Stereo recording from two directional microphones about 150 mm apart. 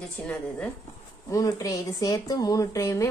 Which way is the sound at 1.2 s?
20° left (ahead or behind).